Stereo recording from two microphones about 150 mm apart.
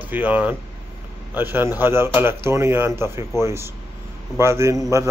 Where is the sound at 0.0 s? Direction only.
10° right (ahead or behind).